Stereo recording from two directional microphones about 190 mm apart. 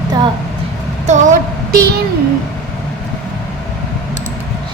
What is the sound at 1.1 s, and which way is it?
Speech, 40° right (ahead or behind).